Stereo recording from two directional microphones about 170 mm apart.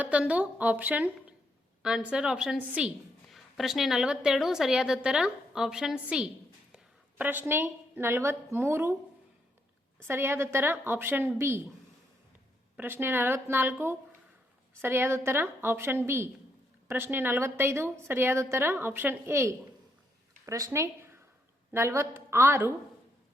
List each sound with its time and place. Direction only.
0.0 s a woman's voice: 10° right (ahead or behind)
10.1 s a woman's voice: 15° right (ahead or behind)
12.7 s a woman's voice: 10° right (ahead or behind)